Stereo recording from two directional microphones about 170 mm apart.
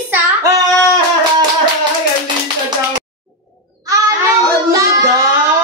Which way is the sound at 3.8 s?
20° right (ahead or behind).